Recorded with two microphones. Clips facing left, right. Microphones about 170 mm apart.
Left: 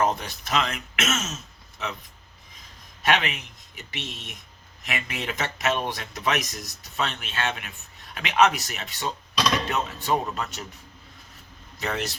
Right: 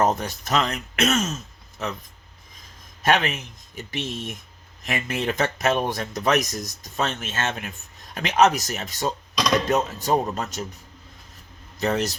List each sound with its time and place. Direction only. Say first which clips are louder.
0.0 s speech: right 3 dB; 45° right (ahead or behind)
3.0 s speech: right 3 dB; 45° right (ahead or behind)
11.8 s speech: right 6 dB; 40° right (ahead or behind)